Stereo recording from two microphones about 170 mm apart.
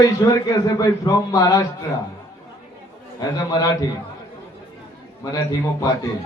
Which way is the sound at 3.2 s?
25° left (ahead or behind).